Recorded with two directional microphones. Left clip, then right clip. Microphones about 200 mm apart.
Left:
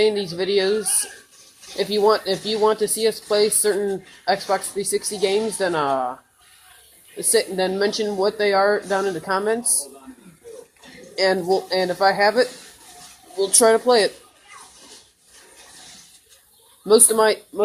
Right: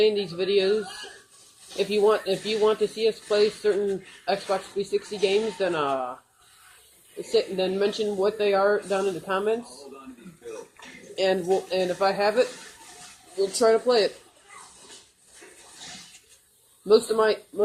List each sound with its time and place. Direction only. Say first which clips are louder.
0.0 s speech: left 3 dB; 15° left (ahead or behind)
7.3 s speech: left 4 dB; 15° left (ahead or behind)
11.1 s speech: left 4 dB; 15° left (ahead or behind)
16.8 s speech: left 4 dB; 15° left (ahead or behind)